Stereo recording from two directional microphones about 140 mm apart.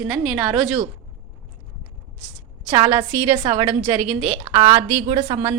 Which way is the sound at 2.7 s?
35° right (ahead or behind).